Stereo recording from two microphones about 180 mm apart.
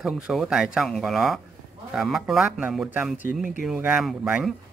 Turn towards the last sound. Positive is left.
turn(degrees=-5)  # may be behind; listen again after turning